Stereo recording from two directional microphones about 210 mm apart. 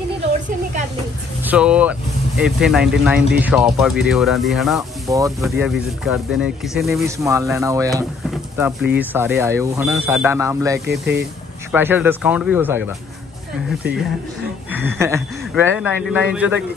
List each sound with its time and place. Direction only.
1.4 s speech: 5° right (ahead or behind)
5.0 s speech: 15° right (ahead or behind)
5.6 s speech: centre (ahead or behind)
7.1 s speech: 15° right (ahead or behind)
10.9 s speech: 55° right (ahead or behind)
11.7 s speech: 10° right (ahead or behind)
14.7 s speech: 10° right (ahead or behind)